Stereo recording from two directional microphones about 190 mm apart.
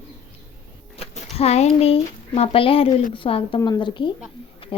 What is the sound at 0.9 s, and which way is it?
A woman's voice, 35° left (ahead or behind).